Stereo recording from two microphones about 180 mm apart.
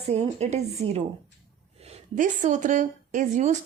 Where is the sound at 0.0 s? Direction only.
35° right (ahead or behind).